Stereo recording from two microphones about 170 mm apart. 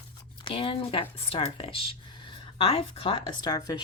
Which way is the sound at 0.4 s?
30° left (ahead or behind).